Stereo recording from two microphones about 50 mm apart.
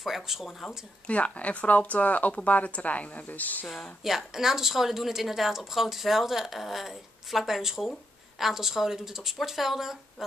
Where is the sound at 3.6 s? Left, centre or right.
Centre.